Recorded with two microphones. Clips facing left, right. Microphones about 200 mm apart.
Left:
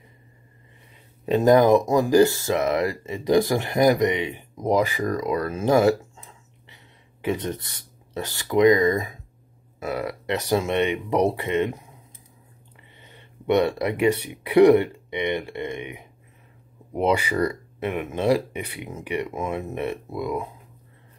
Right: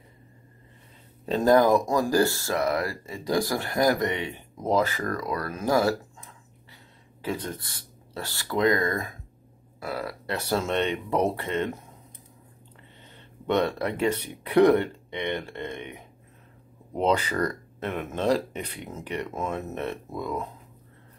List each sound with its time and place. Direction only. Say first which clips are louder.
1.2 s speech: left 3 dB; 15° left (ahead or behind)
7.2 s speech: left 5 dB; 20° left (ahead or behind)
13.0 s speech: left 4 dB; 10° left (ahead or behind)